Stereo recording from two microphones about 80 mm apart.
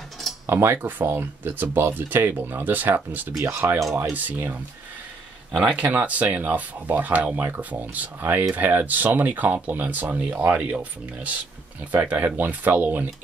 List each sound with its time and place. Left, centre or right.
0.5 s speech: right
4.0 s speech: right